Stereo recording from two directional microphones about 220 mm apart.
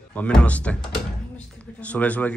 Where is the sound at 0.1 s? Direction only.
5° left (ahead or behind).